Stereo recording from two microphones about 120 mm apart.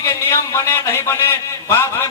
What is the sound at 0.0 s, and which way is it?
A man's voice, 25° left (ahead or behind).